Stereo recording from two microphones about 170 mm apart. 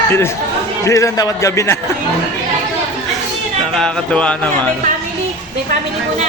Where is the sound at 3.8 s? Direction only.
5° left (ahead or behind).